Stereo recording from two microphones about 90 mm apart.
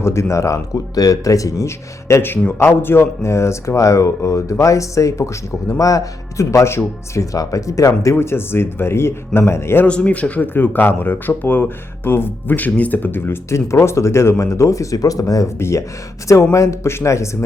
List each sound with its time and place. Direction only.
0.0 s speech: 30° left (ahead or behind)
9.8 s speech: 15° left (ahead or behind); by 17.2 s 30° left (ahead or behind)